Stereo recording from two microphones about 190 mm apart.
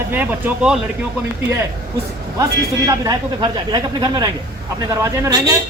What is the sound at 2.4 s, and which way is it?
Speech, 20° right (ahead or behind).